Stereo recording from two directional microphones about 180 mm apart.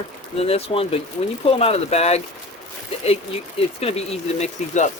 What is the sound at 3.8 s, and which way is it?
Speech, 35° left (ahead or behind).